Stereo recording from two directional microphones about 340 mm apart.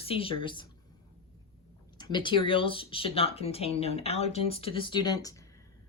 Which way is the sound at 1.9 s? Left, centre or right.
Centre.